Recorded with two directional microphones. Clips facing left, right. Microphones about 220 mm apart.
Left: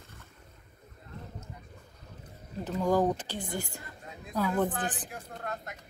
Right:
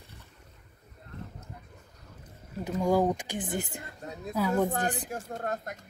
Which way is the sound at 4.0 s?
40° right (ahead or behind).